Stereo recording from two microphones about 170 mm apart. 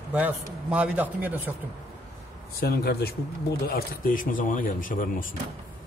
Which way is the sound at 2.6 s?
70° left (ahead or behind).